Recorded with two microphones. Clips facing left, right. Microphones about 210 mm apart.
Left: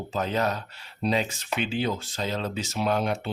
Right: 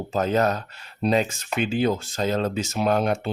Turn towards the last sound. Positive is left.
turn(degrees=-50)  # may be behind; listen again after turning